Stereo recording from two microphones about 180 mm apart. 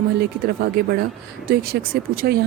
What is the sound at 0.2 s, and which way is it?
Speech, 60° right (ahead or behind).